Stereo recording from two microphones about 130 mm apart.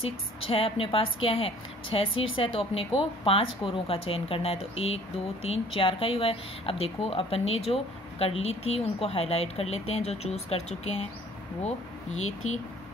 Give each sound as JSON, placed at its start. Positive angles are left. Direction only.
{"t": 0.0, "sound": "speech", "side_deg": 45}